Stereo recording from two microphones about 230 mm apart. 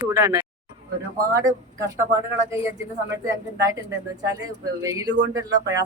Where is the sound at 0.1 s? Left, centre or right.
Centre.